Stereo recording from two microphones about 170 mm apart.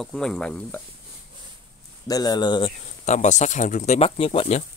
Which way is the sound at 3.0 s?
45° left (ahead or behind).